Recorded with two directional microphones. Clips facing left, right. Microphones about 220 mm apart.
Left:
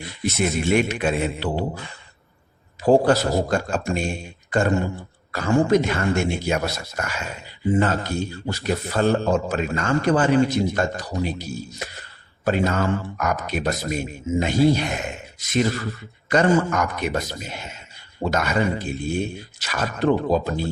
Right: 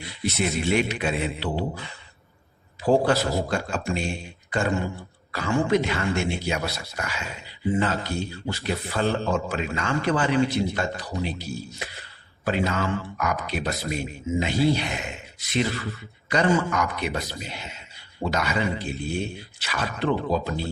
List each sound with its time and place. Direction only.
0.0 s speech: 45° left (ahead or behind)
11.8 s a sound: 45° left (ahead or behind)
12.5 s speech: 45° left (ahead or behind)